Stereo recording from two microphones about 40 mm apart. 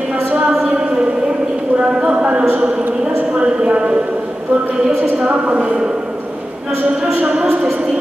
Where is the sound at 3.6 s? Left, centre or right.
Right.